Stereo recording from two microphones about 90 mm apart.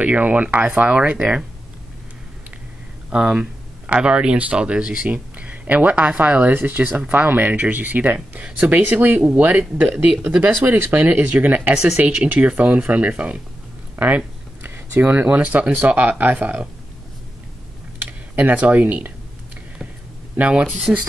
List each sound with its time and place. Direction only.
0.0 s speech: 15° right (ahead or behind)
3.1 s speech: 10° right (ahead or behind)
18.3 s speech: 15° right (ahead or behind)
20.3 s speech: 15° right (ahead or behind)